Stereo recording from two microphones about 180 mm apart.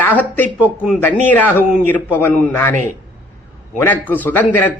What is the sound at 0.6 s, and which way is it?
Speech, 10° right (ahead or behind).